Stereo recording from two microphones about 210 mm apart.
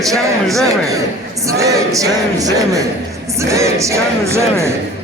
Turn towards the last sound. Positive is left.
turn(degrees=-15)  # may be behind; listen again after turning